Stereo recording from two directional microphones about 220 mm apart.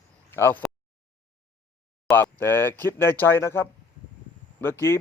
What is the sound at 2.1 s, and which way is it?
Speech, 10° left (ahead or behind).